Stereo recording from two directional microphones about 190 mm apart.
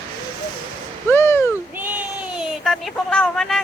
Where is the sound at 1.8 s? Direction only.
10° right (ahead or behind).